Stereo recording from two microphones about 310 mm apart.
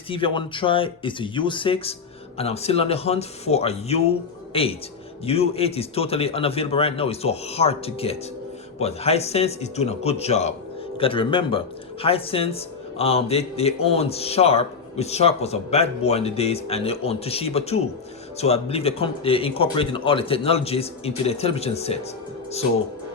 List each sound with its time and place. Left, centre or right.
0.1 s a man's voice: centre